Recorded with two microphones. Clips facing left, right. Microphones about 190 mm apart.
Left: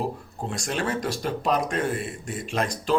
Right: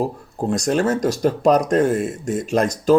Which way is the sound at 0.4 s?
45° right (ahead or behind).